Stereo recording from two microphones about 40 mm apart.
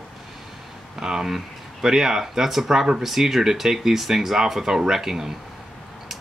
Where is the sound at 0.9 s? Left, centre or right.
Centre.